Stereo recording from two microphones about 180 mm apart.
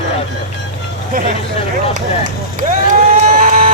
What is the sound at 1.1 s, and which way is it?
Vehicle, 50° right (ahead or behind).